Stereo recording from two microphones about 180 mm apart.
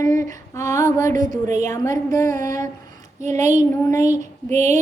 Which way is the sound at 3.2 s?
40° right (ahead or behind).